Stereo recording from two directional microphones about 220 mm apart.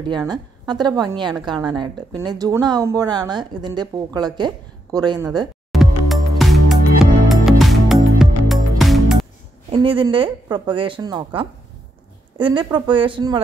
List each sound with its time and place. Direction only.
0.3 s a woman's voice: 20° right (ahead or behind)
5.7 s music: centre (ahead or behind)
9.7 s speech: 20° right (ahead or behind)